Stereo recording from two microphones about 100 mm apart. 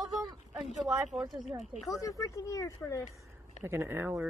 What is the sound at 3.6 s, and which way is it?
Speech, 20° right (ahead or behind).